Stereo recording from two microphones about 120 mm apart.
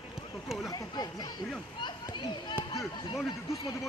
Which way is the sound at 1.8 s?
40° left (ahead or behind).